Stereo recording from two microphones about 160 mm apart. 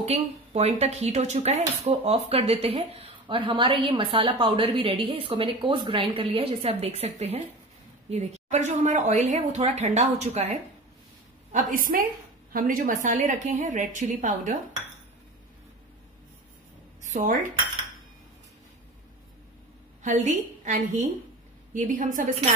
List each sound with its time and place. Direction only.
0.0 s a woman's voice: 40° right (ahead or behind)
11.5 s a woman's voice: 55° right (ahead or behind)
17.0 s speech: 50° right (ahead or behind)
20.0 s a woman's voice: 50° right (ahead or behind)